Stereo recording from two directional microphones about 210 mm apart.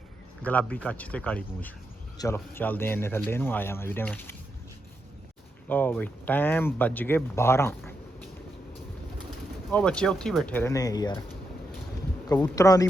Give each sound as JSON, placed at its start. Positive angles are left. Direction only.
{"t": 0.4, "sound": "speech", "side_deg": 5}
{"t": 5.6, "sound": "speech", "side_deg": 10}
{"t": 9.7, "sound": "speech", "side_deg": 5}
{"t": 12.3, "sound": "speech", "side_deg": 15}